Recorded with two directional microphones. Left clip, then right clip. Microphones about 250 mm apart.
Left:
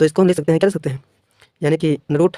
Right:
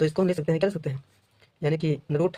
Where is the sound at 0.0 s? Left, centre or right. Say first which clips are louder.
Left 9 dB; left.